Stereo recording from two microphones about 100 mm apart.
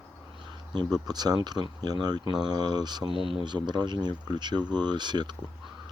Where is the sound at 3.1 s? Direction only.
60° right (ahead or behind).